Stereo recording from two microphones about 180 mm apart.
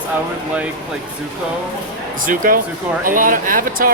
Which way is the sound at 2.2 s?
50° right (ahead or behind).